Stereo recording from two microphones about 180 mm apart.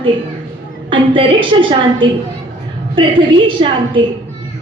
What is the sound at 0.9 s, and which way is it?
Speech, 30° right (ahead or behind).